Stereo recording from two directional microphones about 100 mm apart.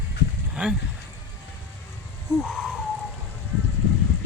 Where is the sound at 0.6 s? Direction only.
10° right (ahead or behind).